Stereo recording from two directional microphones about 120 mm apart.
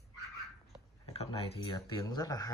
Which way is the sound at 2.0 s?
30° left (ahead or behind).